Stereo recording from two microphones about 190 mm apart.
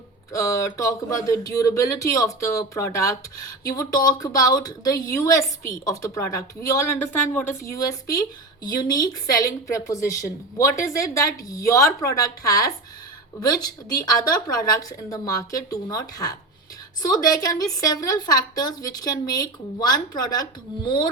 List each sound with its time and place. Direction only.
0.3 s a woman's voice: 15° left (ahead or behind)